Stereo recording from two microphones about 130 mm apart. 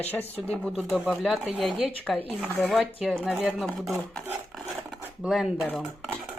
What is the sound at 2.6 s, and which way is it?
Speech, centre (ahead or behind).